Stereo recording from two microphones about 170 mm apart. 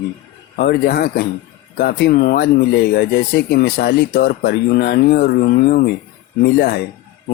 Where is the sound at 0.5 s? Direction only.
65° left (ahead or behind).